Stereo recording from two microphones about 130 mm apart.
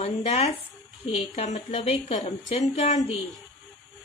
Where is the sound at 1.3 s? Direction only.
60° left (ahead or behind).